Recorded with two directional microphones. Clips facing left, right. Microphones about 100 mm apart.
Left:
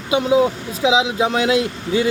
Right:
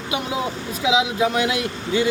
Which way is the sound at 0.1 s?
25° left (ahead or behind).